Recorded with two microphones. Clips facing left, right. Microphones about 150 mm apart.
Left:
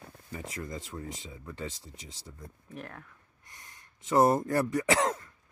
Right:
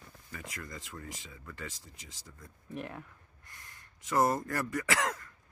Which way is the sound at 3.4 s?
25° left (ahead or behind).